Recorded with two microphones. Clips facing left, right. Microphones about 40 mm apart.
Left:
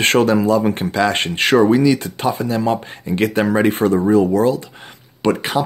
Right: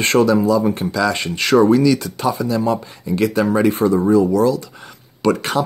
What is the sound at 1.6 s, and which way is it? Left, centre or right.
Speech, left.